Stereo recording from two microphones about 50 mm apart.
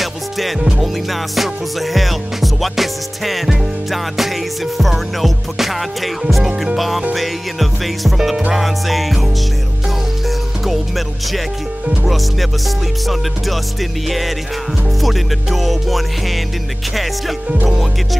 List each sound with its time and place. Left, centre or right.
0.0 s music: centre
0.6 s music: centre
1.1 s music: centre
7.2 s music: centre
10.6 s music: centre
14.0 s music: centre